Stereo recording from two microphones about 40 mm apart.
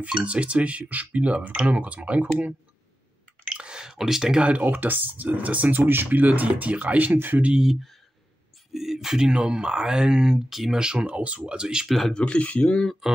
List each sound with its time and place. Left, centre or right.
0.1 s speech: right
3.5 s a sound: right
4.4 s speech: right
4.6 s speech: right
6.1 s speech: right
7.2 s speech: right
8.7 s speech: centre
10.5 s speech: centre
10.8 s speech: centre
11.1 s speech: right; by 11.9 s centre
12.1 s speech: left
12.4 s speech: left
13.0 s speech: centre